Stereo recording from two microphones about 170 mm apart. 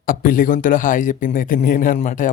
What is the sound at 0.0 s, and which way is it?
A man's voice, 55° left (ahead or behind).